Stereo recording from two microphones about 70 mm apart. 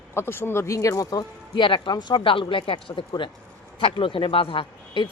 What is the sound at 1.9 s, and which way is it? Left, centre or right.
Speech, left.